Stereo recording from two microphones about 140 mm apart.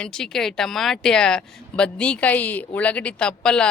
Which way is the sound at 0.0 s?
5° left (ahead or behind).